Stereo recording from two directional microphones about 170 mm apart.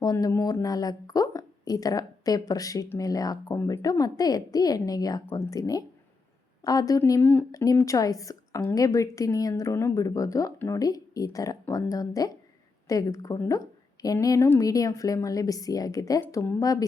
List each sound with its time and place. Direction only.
0.0 s a woman's voice: 20° left (ahead or behind)